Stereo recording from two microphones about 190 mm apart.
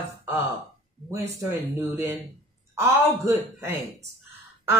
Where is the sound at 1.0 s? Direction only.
15° right (ahead or behind).